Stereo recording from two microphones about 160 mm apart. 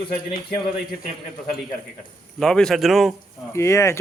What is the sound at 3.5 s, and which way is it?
Speech, 15° left (ahead or behind).